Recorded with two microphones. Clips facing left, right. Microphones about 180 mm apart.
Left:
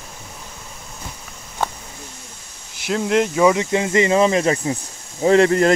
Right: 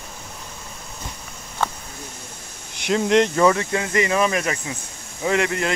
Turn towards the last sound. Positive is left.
turn(degrees=40)  # may be behind; listen again after turning